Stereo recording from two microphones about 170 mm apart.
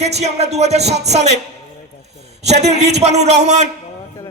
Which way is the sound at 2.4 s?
40° right (ahead or behind).